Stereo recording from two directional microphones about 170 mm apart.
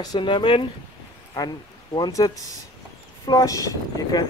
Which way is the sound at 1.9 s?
25° left (ahead or behind).